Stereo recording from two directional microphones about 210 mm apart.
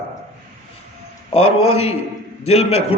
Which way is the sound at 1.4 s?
90° left.